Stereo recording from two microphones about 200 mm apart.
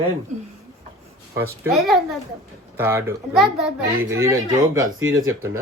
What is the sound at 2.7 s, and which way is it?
Speech, 10° right (ahead or behind).